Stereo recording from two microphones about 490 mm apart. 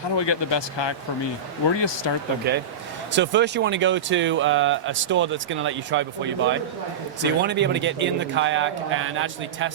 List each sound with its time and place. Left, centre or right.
0.2 s speech: left
2.0 s speech: left
2.5 s speech: centre